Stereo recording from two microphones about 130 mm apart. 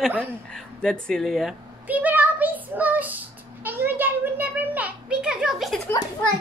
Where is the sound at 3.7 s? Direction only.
15° right (ahead or behind).